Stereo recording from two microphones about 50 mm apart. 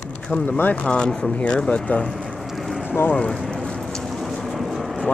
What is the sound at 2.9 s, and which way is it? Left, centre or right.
Speech, left.